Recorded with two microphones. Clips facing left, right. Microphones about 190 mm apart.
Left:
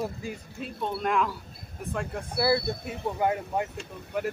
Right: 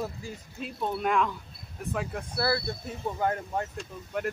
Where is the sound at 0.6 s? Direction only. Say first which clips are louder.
Right 1 dB; centre (ahead or behind).